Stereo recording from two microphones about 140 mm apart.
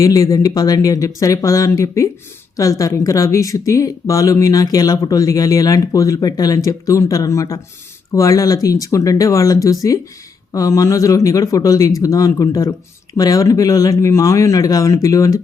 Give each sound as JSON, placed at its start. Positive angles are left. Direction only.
{"t": 0.0, "sound": "speech", "side_deg": 25}